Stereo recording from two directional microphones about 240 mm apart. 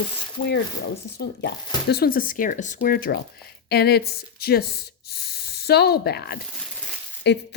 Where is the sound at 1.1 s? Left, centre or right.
Left.